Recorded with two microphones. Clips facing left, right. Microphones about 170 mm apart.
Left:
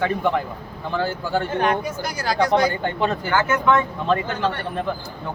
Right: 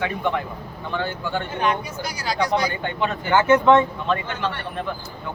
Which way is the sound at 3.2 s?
25° right (ahead or behind).